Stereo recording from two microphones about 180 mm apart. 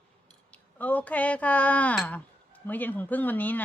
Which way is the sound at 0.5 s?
10° left (ahead or behind).